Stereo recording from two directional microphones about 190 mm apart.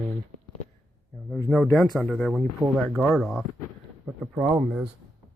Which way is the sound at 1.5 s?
Centre (ahead or behind).